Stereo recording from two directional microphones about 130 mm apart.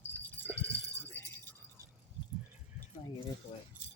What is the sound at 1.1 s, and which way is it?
Keys jangling, 15° left (ahead or behind).